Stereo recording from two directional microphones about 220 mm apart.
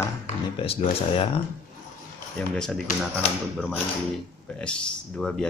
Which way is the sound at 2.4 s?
5° left (ahead or behind).